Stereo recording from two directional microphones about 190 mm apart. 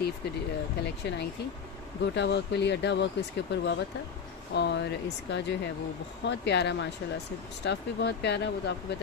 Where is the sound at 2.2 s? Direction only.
65° left (ahead or behind).